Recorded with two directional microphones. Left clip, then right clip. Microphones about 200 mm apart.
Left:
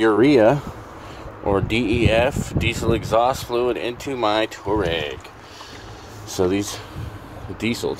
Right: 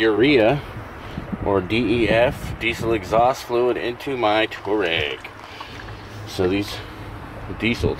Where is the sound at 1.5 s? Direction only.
15° left (ahead or behind).